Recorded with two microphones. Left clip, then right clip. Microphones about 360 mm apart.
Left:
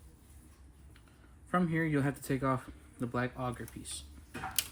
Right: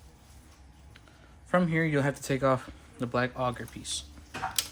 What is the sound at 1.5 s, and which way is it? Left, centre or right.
Speech, right.